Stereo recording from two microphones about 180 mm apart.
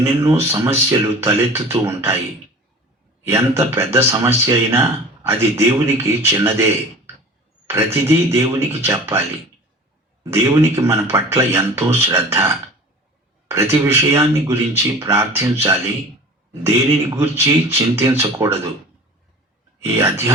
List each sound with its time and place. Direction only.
0.0 s speech: 15° right (ahead or behind)
3.2 s speech: 15° right (ahead or behind)
7.9 s speech: 15° right (ahead or behind)
10.2 s speech: 15° right (ahead or behind)
19.8 s speech: 15° right (ahead or behind)